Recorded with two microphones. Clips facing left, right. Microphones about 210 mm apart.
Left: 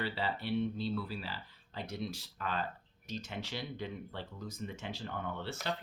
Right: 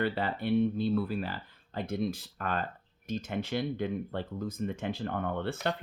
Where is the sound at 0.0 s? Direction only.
55° right (ahead or behind).